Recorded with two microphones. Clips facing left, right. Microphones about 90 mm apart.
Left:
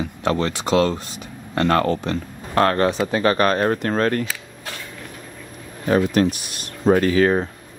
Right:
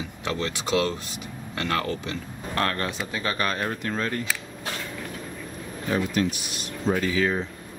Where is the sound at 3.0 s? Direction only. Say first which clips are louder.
Left 10 dB; 55° left (ahead or behind).